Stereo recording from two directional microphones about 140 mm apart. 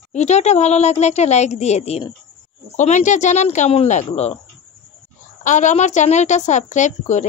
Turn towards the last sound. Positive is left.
turn(degrees=60)  # may be behind; listen again after turning